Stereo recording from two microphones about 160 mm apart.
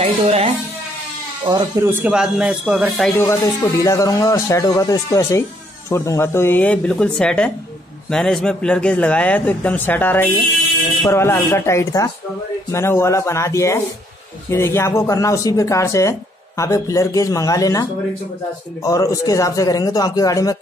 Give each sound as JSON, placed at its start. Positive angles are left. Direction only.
{"t": 0.0, "sound": "music", "side_deg": -40}
{"t": 1.9, "sound": "speech", "side_deg": -10}
{"t": 3.2, "sound": "a man's voice", "side_deg": 20}